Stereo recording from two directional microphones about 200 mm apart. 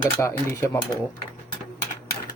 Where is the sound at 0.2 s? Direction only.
15° left (ahead or behind).